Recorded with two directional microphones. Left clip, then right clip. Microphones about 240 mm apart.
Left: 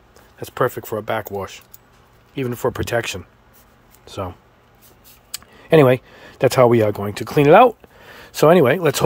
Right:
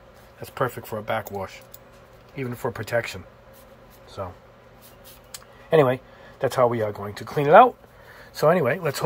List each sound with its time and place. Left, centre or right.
0.4 s speech: left
2.3 s speech: left
5.3 s speech: left